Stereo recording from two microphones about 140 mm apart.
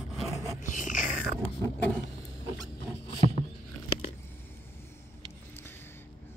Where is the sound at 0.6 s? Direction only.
65° left (ahead or behind).